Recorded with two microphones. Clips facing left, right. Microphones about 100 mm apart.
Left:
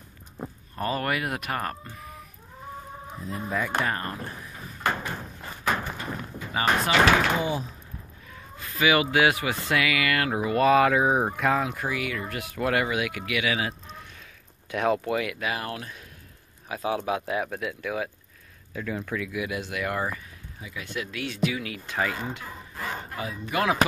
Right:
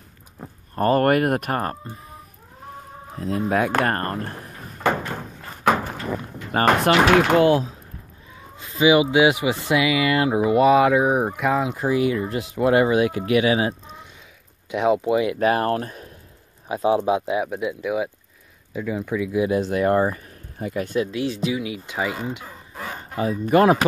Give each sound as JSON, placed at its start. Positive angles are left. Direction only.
{"t": 0.7, "sound": "speech", "side_deg": -50}
{"t": 3.2, "sound": "drawer open or close", "side_deg": -85}
{"t": 6.5, "sound": "speech", "side_deg": -60}
{"t": 7.2, "sound": "speech", "side_deg": -85}
{"t": 8.5, "sound": "speech", "side_deg": -20}
{"t": 11.7, "sound": "speech", "side_deg": -25}
{"t": 14.7, "sound": "speech", "side_deg": -15}
{"t": 15.3, "sound": "speech", "side_deg": -40}
{"t": 16.6, "sound": "speech", "side_deg": -25}
{"t": 17.3, "sound": "speech", "side_deg": -15}
{"t": 20.5, "sound": "speech", "side_deg": -50}
{"t": 21.0, "sound": "speech", "side_deg": -30}
{"t": 21.5, "sound": "speech", "side_deg": -15}
{"t": 23.2, "sound": "speech", "side_deg": -40}